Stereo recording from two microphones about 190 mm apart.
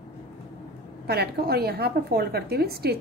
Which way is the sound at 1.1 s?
55° right (ahead or behind).